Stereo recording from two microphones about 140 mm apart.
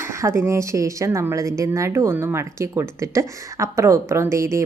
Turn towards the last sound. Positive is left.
turn(degrees=-20)  # may be behind; listen again after turning